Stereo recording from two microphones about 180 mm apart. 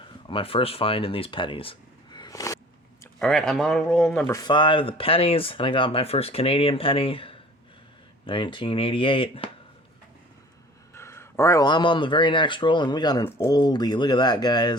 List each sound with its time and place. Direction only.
0.3 s speech: 30° left (ahead or behind)
3.2 s speech: 5° left (ahead or behind)
4.3 s speech: 20° left (ahead or behind)
10.9 s speech: 15° left (ahead or behind)